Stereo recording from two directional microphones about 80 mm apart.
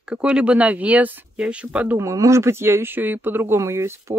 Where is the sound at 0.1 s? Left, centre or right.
Centre.